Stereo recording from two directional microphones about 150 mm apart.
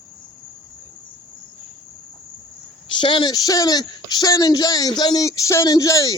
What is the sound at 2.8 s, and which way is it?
A woman's voice, 30° left (ahead or behind).